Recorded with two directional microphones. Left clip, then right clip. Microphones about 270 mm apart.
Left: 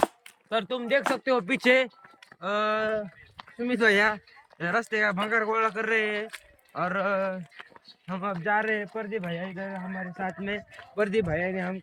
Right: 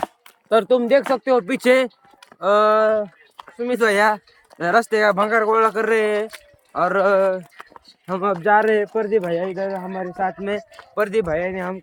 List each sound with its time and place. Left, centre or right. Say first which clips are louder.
0.5 s speech: right 11 dB; centre
7.6 s a sound: right 5 dB; centre
8.2 s speech: right 10 dB; right